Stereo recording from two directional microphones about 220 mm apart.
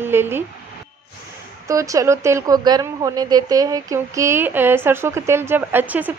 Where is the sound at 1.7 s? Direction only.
15° right (ahead or behind).